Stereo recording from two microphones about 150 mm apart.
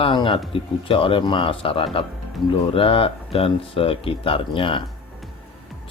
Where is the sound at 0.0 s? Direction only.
35° left (ahead or behind).